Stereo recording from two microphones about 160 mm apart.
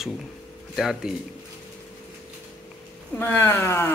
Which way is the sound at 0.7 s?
Centre (ahead or behind).